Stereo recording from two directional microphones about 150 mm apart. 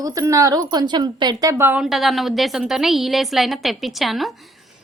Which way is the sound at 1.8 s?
Centre (ahead or behind).